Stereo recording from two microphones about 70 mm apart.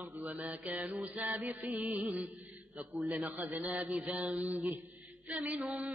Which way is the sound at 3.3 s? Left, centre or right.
Right.